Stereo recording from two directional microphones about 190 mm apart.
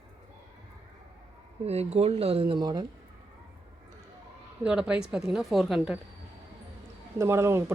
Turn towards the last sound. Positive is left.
turn(degrees=-15)  # may be behind; listen again after turning